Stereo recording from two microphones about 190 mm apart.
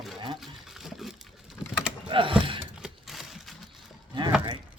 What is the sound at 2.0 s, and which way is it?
Mechanisms, 25° right (ahead or behind).